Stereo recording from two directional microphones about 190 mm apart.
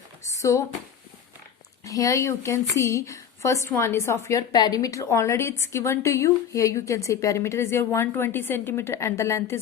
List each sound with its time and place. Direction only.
0.3 s speech: 15° left (ahead or behind)
1.8 s a woman's voice: 20° left (ahead or behind)